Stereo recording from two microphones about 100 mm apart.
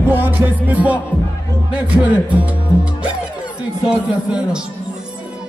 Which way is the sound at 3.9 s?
10° right (ahead or behind).